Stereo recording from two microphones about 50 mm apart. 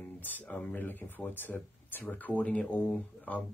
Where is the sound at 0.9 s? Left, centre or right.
Left.